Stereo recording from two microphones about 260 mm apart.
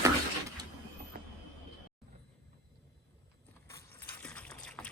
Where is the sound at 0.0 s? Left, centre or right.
Centre.